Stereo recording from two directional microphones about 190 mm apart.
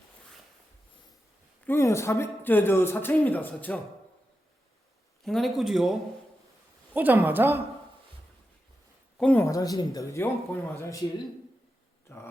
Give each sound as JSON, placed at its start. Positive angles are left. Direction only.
{"t": 1.6, "sound": "speech", "side_deg": 15}
{"t": 5.2, "sound": "a man's voice", "side_deg": 0}
{"t": 9.1, "sound": "speech", "side_deg": 10}
{"t": 12.0, "sound": "speech", "side_deg": 15}